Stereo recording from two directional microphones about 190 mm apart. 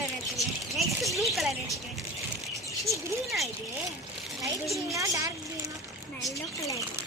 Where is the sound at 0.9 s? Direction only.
Centre (ahead or behind).